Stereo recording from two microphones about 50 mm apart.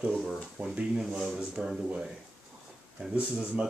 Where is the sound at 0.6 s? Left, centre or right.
Right.